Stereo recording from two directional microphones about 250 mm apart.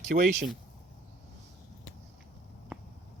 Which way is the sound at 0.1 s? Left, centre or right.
Right.